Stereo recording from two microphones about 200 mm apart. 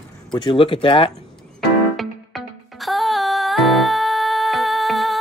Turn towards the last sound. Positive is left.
turn(degrees=0)  # may be behind; listen again after turning